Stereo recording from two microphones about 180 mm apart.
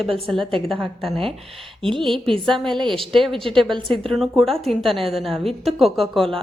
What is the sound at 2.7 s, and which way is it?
Speech, 25° right (ahead or behind).